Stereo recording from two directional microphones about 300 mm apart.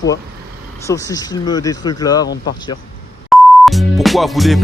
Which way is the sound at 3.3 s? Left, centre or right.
Centre.